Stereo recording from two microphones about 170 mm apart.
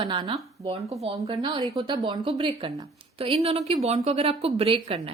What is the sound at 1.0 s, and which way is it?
A woman's voice, 35° right (ahead or behind).